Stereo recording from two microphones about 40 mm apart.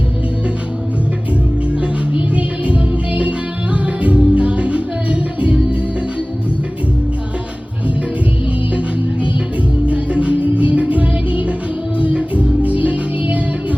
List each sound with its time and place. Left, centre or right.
1.8 s music: right
9.8 s music: right